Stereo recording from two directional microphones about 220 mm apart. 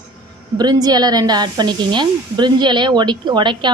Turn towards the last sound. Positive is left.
turn(degrees=-20)  # may be behind; listen again after turning